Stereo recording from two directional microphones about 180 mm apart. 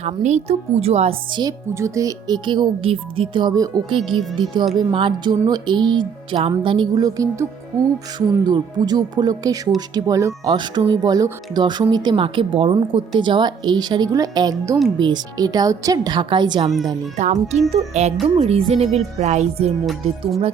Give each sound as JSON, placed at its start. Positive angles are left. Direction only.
{"t": 0.0, "sound": "speech", "side_deg": -40}
{"t": 8.4, "sound": "speech", "side_deg": -25}
{"t": 17.2, "sound": "music", "side_deg": -40}
{"t": 19.8, "sound": "music", "side_deg": 0}